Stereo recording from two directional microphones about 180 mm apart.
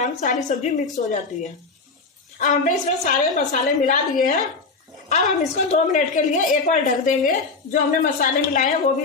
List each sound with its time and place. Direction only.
0.0 s a woman's voice: 40° left (ahead or behind)
2.3 s a woman's voice: 45° left (ahead or behind)